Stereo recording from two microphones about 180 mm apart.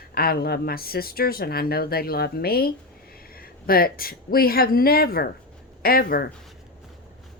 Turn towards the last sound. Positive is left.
turn(degrees=55)  # may be behind; listen again after turning